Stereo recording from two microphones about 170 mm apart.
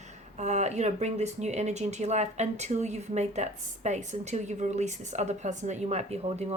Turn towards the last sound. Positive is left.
turn(degrees=-40)  # may be behind; listen again after turning